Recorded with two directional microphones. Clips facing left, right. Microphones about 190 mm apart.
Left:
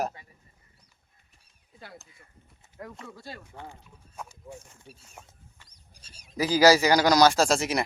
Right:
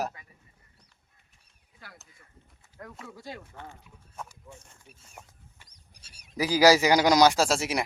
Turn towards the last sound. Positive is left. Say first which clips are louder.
# left 2 dB
turn(degrees=-5)  # may be behind; listen again after turning